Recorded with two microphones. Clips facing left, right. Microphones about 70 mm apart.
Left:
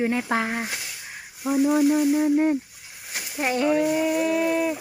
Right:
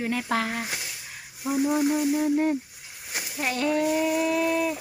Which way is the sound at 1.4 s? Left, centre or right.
Centre.